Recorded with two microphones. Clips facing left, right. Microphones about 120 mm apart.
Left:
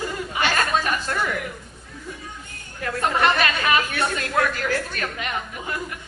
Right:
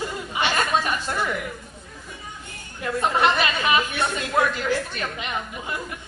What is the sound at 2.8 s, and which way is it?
A woman's voice, 15° right (ahead or behind).